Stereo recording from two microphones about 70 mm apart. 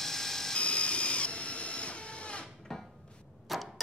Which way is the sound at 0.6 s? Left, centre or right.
Centre.